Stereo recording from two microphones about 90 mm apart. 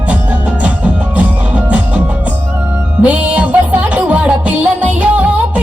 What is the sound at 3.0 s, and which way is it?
Music, 15° right (ahead or behind).